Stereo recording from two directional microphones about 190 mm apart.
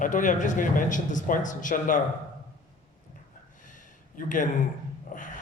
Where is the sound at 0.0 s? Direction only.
45° left (ahead or behind).